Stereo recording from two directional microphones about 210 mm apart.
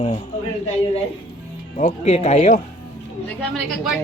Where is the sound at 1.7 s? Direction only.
30° left (ahead or behind).